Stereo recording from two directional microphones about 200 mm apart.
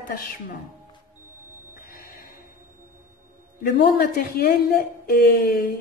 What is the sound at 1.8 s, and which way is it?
Music, 45° left (ahead or behind).